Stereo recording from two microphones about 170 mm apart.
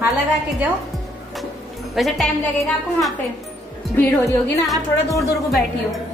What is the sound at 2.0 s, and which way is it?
Speech, centre (ahead or behind).